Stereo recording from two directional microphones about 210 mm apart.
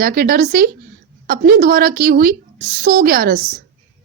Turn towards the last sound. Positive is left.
turn(degrees=-40)  # may be behind; listen again after turning